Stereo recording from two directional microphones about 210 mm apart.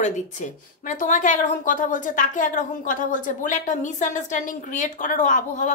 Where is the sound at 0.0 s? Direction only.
35° left (ahead or behind).